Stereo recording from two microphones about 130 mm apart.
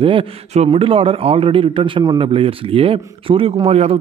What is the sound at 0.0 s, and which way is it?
A man's voice, 45° right (ahead or behind).